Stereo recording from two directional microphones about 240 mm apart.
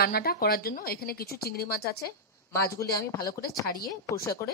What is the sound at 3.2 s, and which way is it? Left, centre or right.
Speech, left.